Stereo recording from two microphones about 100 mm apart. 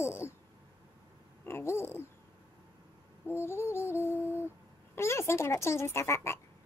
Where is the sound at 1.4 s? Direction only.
25° left (ahead or behind).